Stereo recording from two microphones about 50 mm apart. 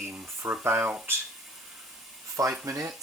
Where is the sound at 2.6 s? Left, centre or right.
Right.